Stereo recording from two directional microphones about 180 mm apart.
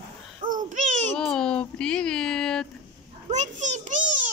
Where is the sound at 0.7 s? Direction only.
45° right (ahead or behind).